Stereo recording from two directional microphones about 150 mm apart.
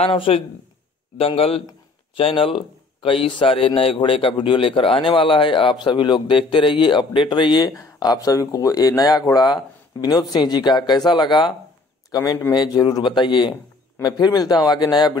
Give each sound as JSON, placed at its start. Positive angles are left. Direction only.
{"t": 0.0, "sound": "a man's voice", "side_deg": 40}
{"t": 12.5, "sound": "a man's voice", "side_deg": 30}